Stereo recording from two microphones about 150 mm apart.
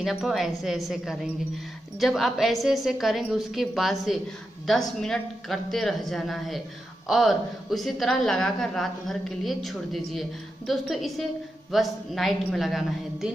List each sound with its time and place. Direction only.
0.0 s a woman's voice: centre (ahead or behind)